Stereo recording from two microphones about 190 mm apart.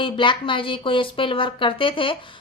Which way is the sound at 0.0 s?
25° left (ahead or behind).